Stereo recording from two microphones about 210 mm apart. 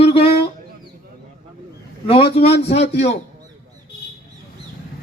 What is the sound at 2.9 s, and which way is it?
Speech, 30° left (ahead or behind).